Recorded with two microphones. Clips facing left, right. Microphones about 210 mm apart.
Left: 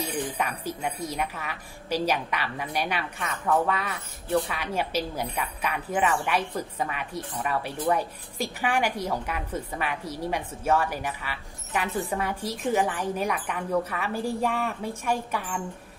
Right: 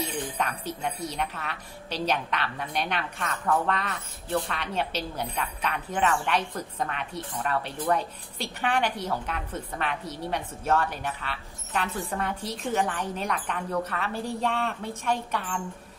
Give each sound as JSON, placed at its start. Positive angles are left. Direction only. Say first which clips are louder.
{"t": 0.4, "sound": "a woman's voice", "louder": "left 1 dB", "side_deg": 10}